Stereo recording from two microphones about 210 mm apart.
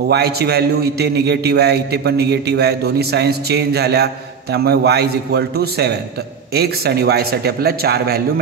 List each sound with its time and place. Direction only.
0.1 s a man's voice: 50° right (ahead or behind)